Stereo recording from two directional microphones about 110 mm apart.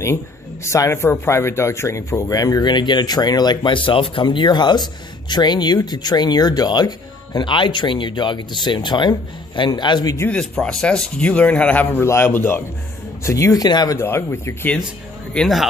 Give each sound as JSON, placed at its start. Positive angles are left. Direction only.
{"t": 0.7, "sound": "speech", "side_deg": 25}
{"t": 10.3, "sound": "a man's voice", "side_deg": 5}
{"t": 13.9, "sound": "speech", "side_deg": 20}
{"t": 15.3, "sound": "speech", "side_deg": 0}